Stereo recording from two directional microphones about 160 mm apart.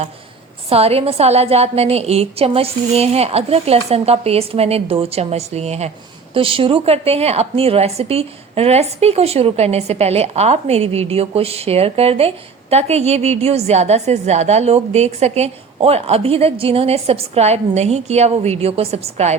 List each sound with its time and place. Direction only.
0.7 s a woman's voice: 40° right (ahead or behind)